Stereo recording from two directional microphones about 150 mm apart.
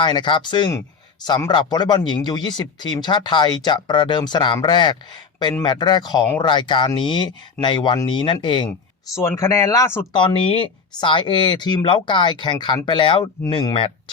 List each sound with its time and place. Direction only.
0.0 s speech: 30° left (ahead or behind)
9.1 s speech: 20° left (ahead or behind)
10.1 s speech: 35° left (ahead or behind)